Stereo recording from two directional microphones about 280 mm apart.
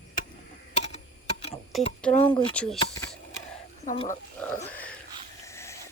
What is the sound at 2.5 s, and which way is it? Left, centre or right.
Speech, centre.